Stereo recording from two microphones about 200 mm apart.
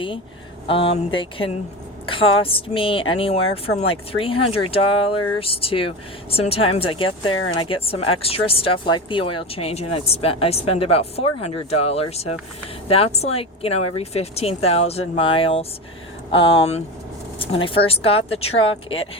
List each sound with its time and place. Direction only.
0.7 s speech: 25° left (ahead or behind)